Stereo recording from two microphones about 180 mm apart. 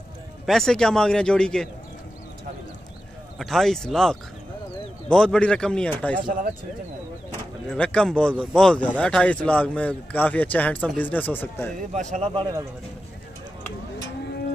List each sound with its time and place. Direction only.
0.5 s a man's voice: 5° left (ahead or behind)
3.3 s a man's voice: centre (ahead or behind)
6.1 s speech: 50° right (ahead or behind)
7.2 s speech: 5° left (ahead or behind)
12.1 s speech: 35° right (ahead or behind)